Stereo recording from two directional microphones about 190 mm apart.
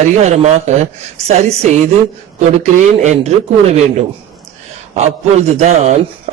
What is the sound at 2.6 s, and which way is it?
A man's voice, 40° right (ahead or behind).